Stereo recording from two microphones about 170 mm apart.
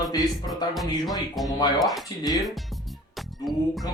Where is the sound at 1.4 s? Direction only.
Centre (ahead or behind).